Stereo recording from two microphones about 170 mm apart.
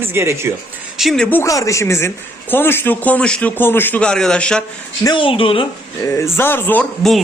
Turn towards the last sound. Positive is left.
turn(degrees=5)  # may be behind; listen again after turning